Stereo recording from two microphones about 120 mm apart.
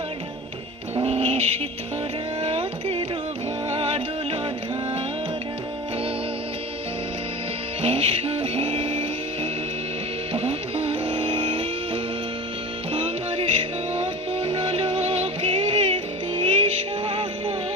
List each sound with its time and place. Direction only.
0.9 s music: 55° right (ahead or behind)
2.4 s a sound: 55° right (ahead or behind)
3.7 s music: 55° right (ahead or behind)
7.8 s music: 55° right (ahead or behind)
12.9 s music: 50° right (ahead or behind)